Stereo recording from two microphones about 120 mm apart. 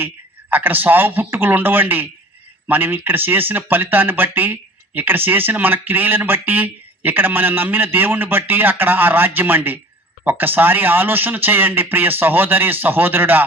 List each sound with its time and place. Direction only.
0.5 s speech: 15° right (ahead or behind)